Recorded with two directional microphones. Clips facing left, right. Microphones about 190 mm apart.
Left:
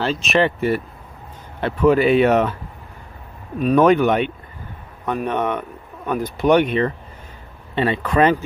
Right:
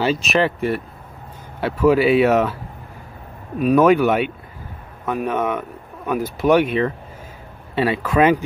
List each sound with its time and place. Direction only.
0.0 s speech: 5° right (ahead or behind)
3.5 s speech: 5° right (ahead or behind)